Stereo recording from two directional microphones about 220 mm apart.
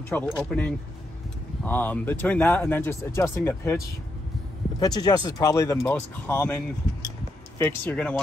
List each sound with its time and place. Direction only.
0.1 s speech: 5° left (ahead or behind)